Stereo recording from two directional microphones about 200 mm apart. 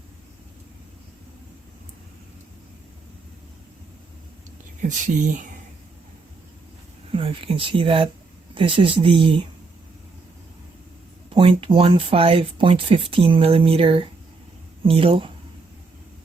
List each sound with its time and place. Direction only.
4.8 s speech: 40° right (ahead or behind)
7.1 s speech: 25° right (ahead or behind)
11.3 s speech: 25° right (ahead or behind)